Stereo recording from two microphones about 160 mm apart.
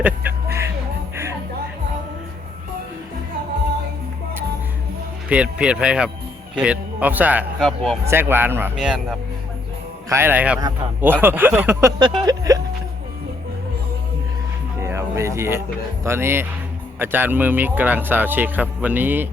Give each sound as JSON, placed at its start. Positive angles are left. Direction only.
{"t": 0.0, "sound": "music", "side_deg": -15}
{"t": 5.3, "sound": "speech", "side_deg": -5}
{"t": 7.6, "sound": "speech", "side_deg": 0}
{"t": 8.0, "sound": "speech", "side_deg": -15}
{"t": 10.1, "sound": "speech", "side_deg": -15}
{"t": 14.8, "sound": "music", "side_deg": -15}
{"t": 16.0, "sound": "speech", "side_deg": -15}